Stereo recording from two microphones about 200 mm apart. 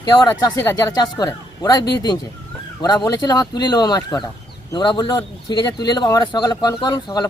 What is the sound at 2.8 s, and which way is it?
Speech, 20° left (ahead or behind).